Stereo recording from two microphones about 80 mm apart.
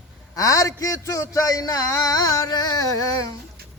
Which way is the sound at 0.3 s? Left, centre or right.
Left.